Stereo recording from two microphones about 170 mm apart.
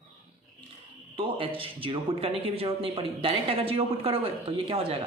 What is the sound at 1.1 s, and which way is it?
A man's voice, 30° right (ahead or behind).